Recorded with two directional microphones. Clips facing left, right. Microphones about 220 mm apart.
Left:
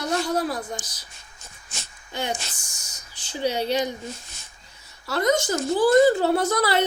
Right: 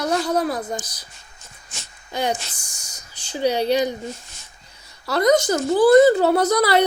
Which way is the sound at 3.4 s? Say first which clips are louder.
Right 5 dB; 35° right (ahead or behind).